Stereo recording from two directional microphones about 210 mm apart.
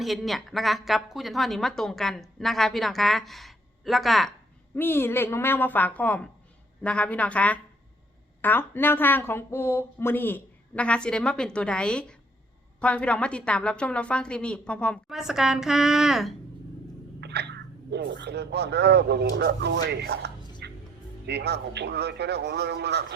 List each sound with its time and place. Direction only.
0.0 s a woman's voice: centre (ahead or behind)
17.2 s speech: 55° right (ahead or behind)
20.6 s music: 55° right (ahead or behind)
21.2 s speech: 50° right (ahead or behind)